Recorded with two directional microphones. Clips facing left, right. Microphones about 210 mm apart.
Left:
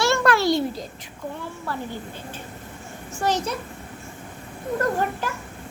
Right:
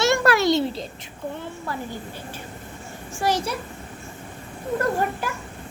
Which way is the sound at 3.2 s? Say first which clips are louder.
Even; 10° right (ahead or behind).